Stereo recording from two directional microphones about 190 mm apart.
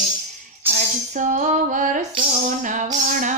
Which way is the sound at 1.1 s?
40° right (ahead or behind).